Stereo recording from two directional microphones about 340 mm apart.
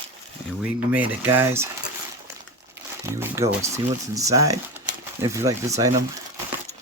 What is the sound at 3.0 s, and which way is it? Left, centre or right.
Speech, centre.